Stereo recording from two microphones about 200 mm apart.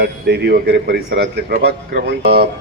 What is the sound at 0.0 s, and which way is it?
A man's voice, 55° right (ahead or behind).